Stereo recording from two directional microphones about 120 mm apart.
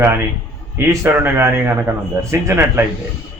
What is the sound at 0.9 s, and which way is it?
A man's voice, 20° right (ahead or behind).